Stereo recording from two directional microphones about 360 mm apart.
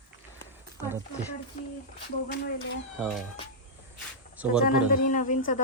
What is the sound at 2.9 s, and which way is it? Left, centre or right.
Speech, centre.